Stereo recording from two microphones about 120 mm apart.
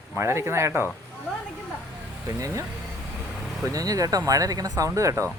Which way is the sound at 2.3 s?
30° right (ahead or behind).